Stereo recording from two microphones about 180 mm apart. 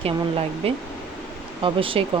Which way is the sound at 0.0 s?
30° right (ahead or behind).